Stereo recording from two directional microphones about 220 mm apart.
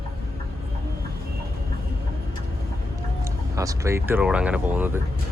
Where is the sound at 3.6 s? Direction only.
15° right (ahead or behind).